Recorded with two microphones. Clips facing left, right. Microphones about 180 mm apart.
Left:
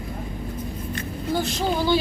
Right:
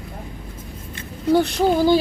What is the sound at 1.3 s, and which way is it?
Speech, 65° right (ahead or behind).